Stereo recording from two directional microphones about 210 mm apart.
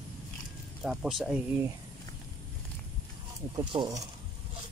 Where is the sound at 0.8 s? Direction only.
Centre (ahead or behind).